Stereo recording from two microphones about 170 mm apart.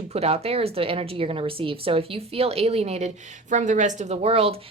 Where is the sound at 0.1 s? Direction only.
35° right (ahead or behind).